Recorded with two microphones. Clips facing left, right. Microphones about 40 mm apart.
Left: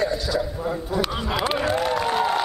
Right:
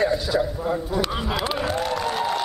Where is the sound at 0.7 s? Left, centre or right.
Centre.